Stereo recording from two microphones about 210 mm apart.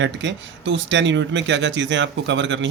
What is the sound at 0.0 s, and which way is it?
Speech, 60° right (ahead or behind).